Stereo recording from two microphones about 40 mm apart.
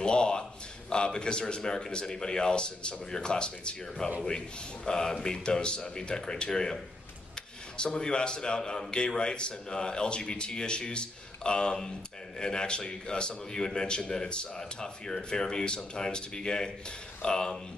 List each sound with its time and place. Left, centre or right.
0.0 s a man's voice: left